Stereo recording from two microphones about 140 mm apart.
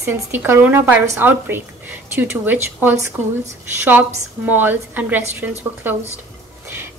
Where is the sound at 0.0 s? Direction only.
15° right (ahead or behind).